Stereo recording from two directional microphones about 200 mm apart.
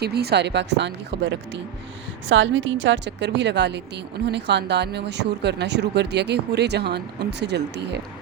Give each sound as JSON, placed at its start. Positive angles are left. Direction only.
{"t": 0.0, "sound": "a woman's voice", "side_deg": -55}
{"t": 2.3, "sound": "a woman's voice", "side_deg": -70}